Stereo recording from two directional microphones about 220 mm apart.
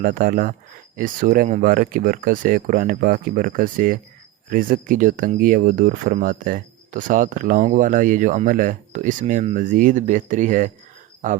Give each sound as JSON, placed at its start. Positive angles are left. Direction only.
{"t": 0.0, "sound": "speech", "side_deg": -40}